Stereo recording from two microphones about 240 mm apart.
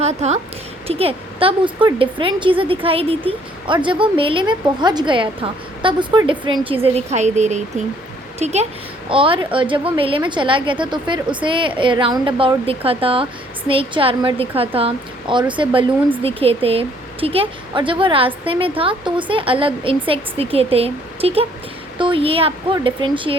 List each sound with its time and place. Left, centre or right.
0.0 s a woman's voice: right